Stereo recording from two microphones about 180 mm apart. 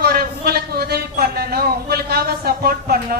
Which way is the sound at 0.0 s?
60° right (ahead or behind).